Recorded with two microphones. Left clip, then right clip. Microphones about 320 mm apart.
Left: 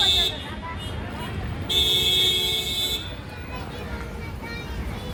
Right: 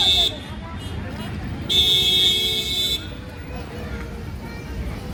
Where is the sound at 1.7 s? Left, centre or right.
Left.